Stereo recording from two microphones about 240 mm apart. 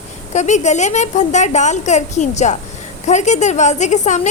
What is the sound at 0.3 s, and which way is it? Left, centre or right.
A woman's voice, left.